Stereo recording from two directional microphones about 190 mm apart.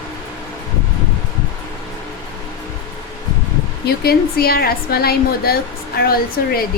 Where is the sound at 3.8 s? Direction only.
55° left (ahead or behind).